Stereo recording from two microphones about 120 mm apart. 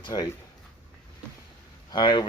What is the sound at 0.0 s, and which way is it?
Speech, 35° left (ahead or behind).